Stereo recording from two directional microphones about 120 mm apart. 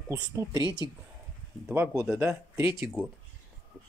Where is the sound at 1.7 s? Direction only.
20° right (ahead or behind).